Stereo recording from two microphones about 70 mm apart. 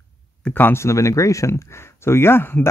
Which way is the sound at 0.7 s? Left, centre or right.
Left.